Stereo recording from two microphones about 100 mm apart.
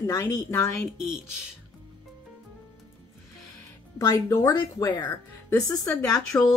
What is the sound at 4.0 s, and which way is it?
A woman's voice, 40° left (ahead or behind).